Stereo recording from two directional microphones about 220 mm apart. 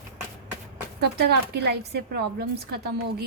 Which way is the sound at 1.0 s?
50° right (ahead or behind).